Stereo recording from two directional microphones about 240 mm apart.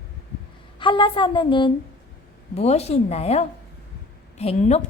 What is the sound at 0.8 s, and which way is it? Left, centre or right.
A woman's voice, centre.